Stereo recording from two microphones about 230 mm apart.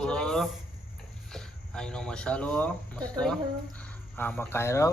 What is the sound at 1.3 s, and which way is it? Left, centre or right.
Speech, centre.